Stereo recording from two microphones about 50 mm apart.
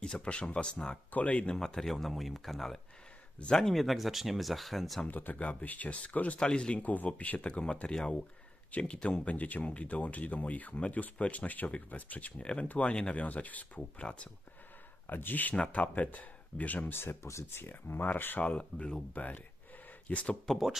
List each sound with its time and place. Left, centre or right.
0.0 s speech: centre
1.6 s speech: centre
5.0 s speech: left
6.8 s speech: left
15.0 s speech: left
15.5 s speech: left
16.9 s speech: left
17.2 s speech: left
17.5 s speech: left
17.9 s speech: left
18.8 s speech: centre
19.1 s speech: left